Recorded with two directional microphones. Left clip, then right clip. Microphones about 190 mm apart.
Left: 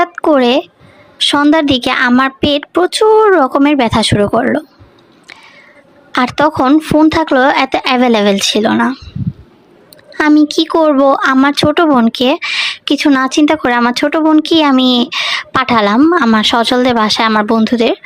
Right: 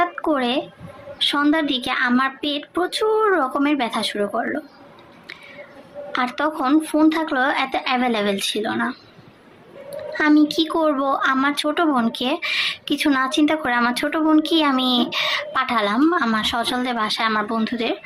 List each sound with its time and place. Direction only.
0.0 s a sound: 50° left (ahead or behind)
1.2 s speech: 50° left (ahead or behind)
6.1 s speech: 50° left (ahead or behind)